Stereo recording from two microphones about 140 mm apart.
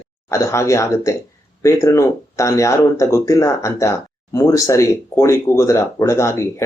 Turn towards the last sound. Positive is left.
turn(degrees=20)  # may be behind; listen again after turning